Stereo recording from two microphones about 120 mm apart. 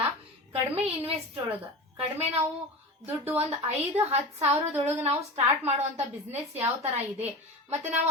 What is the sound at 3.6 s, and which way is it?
A woman's voice, 60° right (ahead or behind).